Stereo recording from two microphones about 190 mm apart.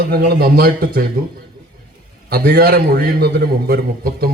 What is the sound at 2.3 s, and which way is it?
A man's voice, 55° right (ahead or behind).